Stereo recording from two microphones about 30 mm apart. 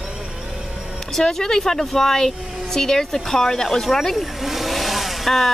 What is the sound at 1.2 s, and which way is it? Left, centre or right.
Speech, centre.